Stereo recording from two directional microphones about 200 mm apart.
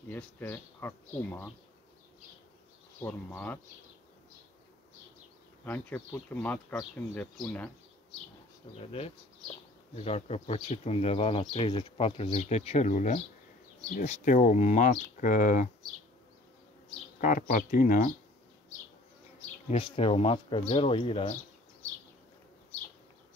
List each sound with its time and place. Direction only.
0.1 s speech: 10° left (ahead or behind)
3.0 s speech: 10° left (ahead or behind)
5.7 s speech: 10° left (ahead or behind)
8.7 s speech: 30° left (ahead or behind)
17.2 s speech: 40° left (ahead or behind)
19.7 s speech: 25° left (ahead or behind)